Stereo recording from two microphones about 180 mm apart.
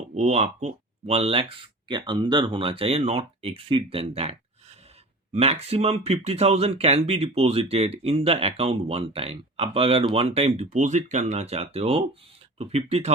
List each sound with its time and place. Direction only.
0.1 s speech: 40° right (ahead or behind)